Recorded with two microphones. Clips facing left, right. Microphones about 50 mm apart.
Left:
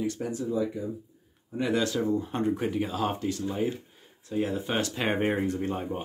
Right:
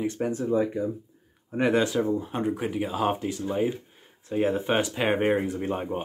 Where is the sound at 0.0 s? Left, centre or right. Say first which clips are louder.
Right 3 dB; right.